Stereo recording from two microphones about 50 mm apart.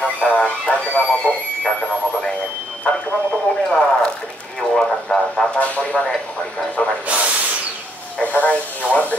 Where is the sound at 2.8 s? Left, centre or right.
Left.